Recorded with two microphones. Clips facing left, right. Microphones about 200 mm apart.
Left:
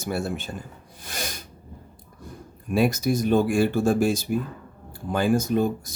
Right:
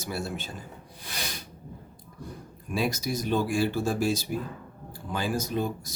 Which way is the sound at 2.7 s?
55° left (ahead or behind).